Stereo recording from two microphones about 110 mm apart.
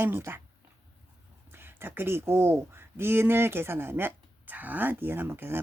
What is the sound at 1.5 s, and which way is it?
Speech, 20° right (ahead or behind).